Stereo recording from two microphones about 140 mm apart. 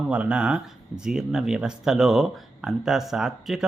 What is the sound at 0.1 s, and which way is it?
Speech, 5° right (ahead or behind).